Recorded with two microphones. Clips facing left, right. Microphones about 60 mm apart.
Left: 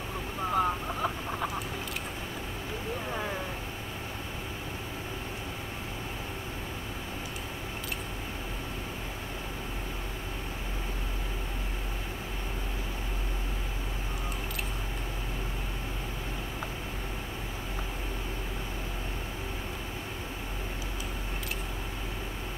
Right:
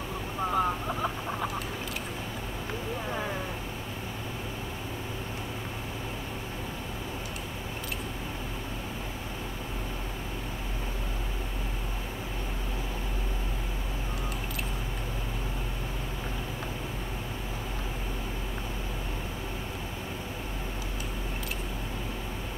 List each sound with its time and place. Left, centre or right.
0.5 s chicken: centre
3.1 s vehicle: centre